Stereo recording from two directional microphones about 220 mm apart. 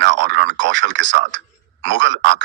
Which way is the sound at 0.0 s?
55° right (ahead or behind).